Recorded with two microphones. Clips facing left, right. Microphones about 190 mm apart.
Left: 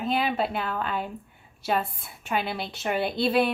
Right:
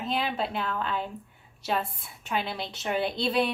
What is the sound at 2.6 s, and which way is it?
Speech, 5° left (ahead or behind).